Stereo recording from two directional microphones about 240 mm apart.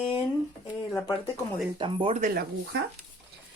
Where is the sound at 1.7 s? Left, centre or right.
Centre; by 2.8 s right.